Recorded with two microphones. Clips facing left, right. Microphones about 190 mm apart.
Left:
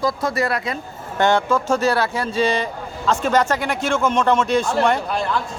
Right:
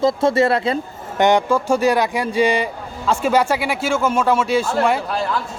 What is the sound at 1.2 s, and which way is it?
Speech, 15° right (ahead or behind).